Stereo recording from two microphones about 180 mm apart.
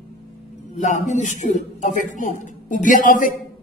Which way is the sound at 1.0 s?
40° left (ahead or behind).